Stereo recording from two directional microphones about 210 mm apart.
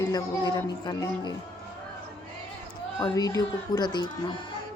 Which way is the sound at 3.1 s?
15° left (ahead or behind).